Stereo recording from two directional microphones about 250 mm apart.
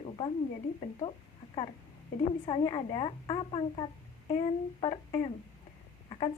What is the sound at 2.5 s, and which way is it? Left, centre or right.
A woman's voice, left.